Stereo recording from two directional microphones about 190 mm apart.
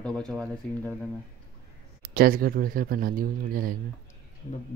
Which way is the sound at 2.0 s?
50° right (ahead or behind).